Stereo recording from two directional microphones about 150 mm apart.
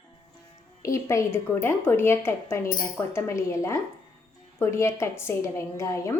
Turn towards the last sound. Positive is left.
turn(degrees=20)  # may be behind; listen again after turning